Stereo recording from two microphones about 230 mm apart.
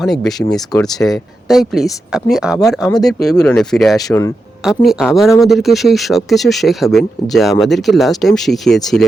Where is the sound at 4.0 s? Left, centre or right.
Centre.